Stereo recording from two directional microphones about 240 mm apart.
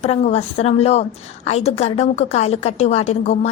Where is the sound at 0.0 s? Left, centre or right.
Left.